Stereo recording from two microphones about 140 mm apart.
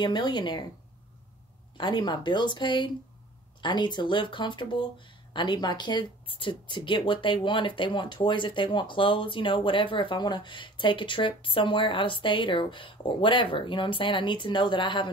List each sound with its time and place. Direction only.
0.0 s speech: 30° left (ahead or behind)
1.8 s speech: 35° left (ahead or behind)